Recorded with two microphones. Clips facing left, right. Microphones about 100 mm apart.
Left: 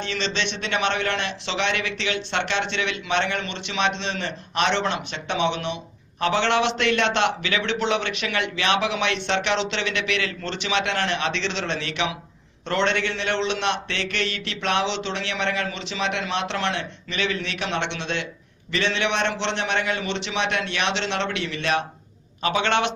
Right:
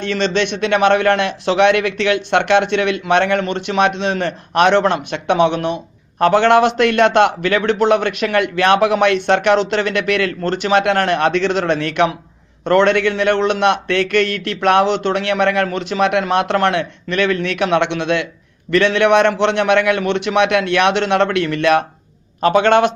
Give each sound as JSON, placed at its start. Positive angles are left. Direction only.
{"t": 0.0, "sound": "a man's voice", "side_deg": -50}